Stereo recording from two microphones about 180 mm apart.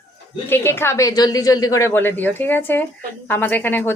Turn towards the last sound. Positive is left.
turn(degrees=10)  # may be behind; listen again after turning